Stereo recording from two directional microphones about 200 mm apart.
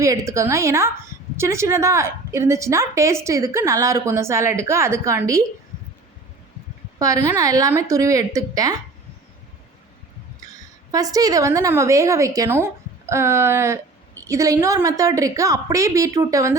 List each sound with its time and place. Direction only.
0.0 s a woman's voice: 15° right (ahead or behind)
7.0 s a woman's voice: 15° right (ahead or behind)
10.9 s a woman's voice: 20° right (ahead or behind)